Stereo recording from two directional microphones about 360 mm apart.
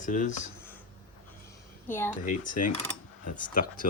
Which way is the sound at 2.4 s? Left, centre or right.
Left.